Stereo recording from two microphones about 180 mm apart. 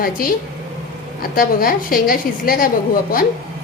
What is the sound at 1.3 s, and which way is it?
A woman's voice, 55° left (ahead or behind).